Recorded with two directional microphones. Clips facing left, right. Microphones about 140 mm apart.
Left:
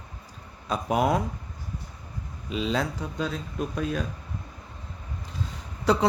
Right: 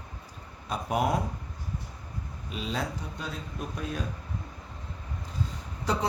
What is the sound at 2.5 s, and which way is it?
Speech, 90° left.